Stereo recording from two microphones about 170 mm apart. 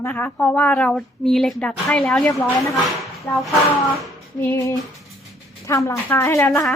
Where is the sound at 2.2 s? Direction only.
15° left (ahead or behind).